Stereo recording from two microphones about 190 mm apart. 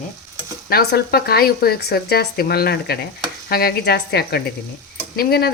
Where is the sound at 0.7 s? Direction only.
55° left (ahead or behind).